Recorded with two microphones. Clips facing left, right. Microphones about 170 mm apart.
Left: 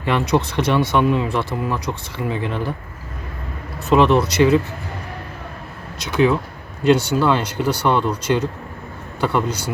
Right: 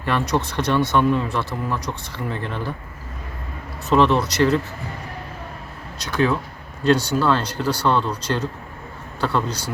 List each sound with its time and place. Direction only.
0.0 s speech: 15° left (ahead or behind)
3.8 s speech: 15° left (ahead or behind)
6.1 s speech: 15° left (ahead or behind)